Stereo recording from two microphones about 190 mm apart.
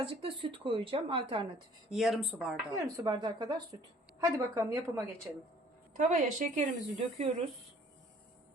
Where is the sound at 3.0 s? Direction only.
20° right (ahead or behind).